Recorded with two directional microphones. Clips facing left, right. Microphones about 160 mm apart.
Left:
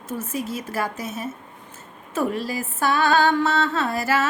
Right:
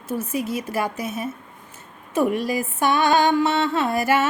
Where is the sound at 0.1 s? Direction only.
10° right (ahead or behind).